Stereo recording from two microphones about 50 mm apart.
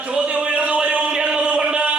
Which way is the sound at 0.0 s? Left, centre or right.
Right.